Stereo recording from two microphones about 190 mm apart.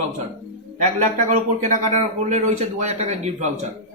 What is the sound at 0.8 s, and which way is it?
A man's voice, 40° right (ahead or behind).